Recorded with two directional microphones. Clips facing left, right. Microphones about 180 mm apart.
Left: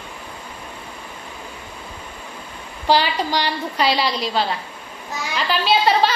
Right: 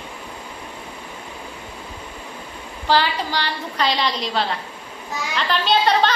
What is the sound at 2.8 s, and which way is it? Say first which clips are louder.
A woman's voice: left 1 dB; 15° left (ahead or behind).